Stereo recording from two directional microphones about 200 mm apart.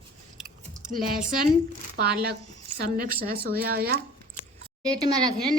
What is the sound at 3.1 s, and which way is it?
Speech, 50° right (ahead or behind).